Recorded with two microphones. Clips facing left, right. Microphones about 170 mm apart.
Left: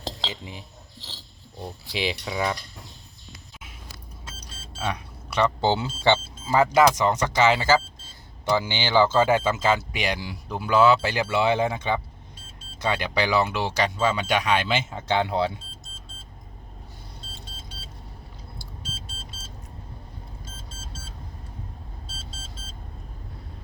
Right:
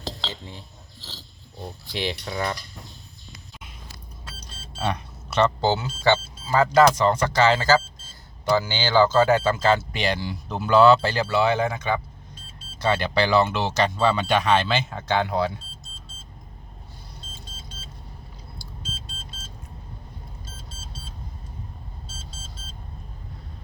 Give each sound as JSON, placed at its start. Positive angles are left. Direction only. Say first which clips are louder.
{"t": 0.3, "sound": "speech", "louder": "left 1 dB", "side_deg": 10}
{"t": 1.9, "sound": "speech", "louder": "even", "side_deg": 5}
{"t": 4.4, "sound": "a sound", "louder": "right 3 dB", "side_deg": 10}
{"t": 5.8, "sound": "speech", "louder": "even", "side_deg": 20}
{"t": 12.8, "sound": "speech", "louder": "right 3 dB", "side_deg": 10}